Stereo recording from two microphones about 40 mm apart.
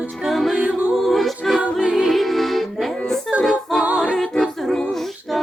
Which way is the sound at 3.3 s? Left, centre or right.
Centre.